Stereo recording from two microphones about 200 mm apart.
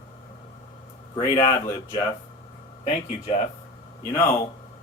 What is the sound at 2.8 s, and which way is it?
Speech, 30° left (ahead or behind).